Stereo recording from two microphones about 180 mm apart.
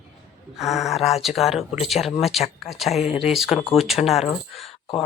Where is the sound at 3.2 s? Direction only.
Centre (ahead or behind).